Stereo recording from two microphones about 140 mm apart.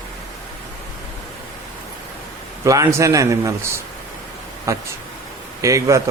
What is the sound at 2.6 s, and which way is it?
Speech, 25° right (ahead or behind).